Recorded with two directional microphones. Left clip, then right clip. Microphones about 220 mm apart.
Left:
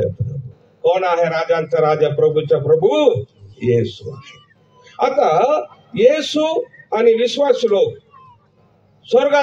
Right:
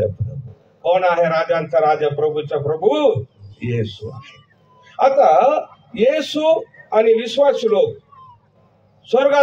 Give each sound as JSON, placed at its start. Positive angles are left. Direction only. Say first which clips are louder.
{"t": 0.8, "sound": "a man's voice", "louder": "even", "side_deg": 55}
{"t": 9.0, "sound": "a man's voice", "louder": "left 1 dB", "side_deg": 55}